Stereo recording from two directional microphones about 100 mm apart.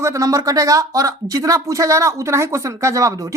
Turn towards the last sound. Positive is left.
turn(degrees=-35)  # may be behind; listen again after turning